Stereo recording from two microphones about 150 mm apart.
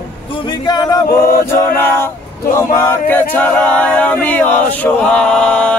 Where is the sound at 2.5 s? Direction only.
20° left (ahead or behind).